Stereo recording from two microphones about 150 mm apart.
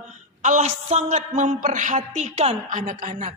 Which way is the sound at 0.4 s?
50° right (ahead or behind).